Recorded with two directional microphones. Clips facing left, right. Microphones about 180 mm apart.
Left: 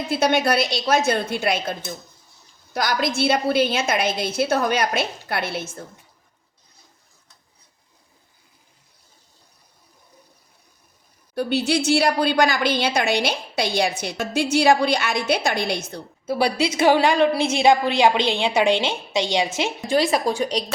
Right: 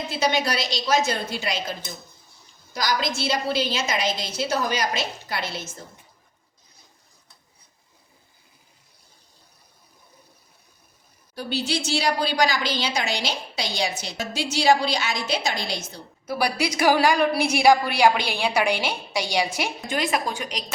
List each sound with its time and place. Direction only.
0.1 s a woman's voice: 55° left (ahead or behind)
11.3 s a woman's voice: 55° left (ahead or behind)
16.2 s a woman's voice: 25° left (ahead or behind)